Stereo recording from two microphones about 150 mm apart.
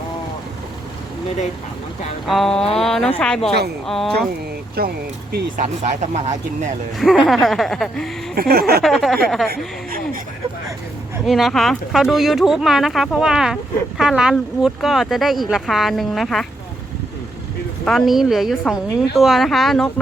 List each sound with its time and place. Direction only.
2.2 s speech: centre (ahead or behind)
4.8 s a sound: 90° right
5.6 s speech: 50° right (ahead or behind)
7.0 s speech: centre (ahead or behind)
8.4 s a sound: 90° right
8.8 s speech: centre (ahead or behind)
11.3 s speech: centre (ahead or behind)
17.8 s speech: centre (ahead or behind)